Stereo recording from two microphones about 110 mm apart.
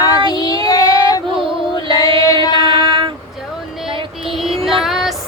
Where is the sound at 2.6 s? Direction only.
50° right (ahead or behind).